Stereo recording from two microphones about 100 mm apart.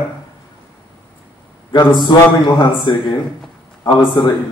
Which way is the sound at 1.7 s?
50° left (ahead or behind).